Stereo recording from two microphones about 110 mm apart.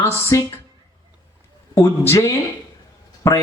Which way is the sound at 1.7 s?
25° left (ahead or behind).